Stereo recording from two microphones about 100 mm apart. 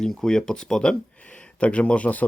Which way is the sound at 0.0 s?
5° left (ahead or behind).